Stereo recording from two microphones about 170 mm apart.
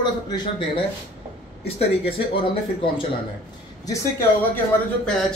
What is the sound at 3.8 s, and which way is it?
Speech, 20° left (ahead or behind).